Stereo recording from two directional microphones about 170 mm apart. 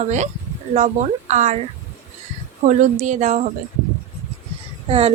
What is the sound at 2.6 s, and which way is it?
Speech, 45° right (ahead or behind).